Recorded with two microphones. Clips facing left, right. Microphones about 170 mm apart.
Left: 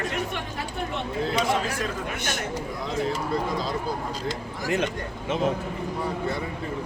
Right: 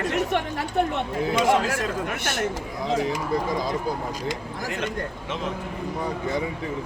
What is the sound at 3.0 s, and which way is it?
Speech, 15° right (ahead or behind).